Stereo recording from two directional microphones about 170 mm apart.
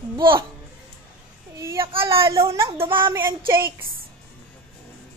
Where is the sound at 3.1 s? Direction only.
15° right (ahead or behind).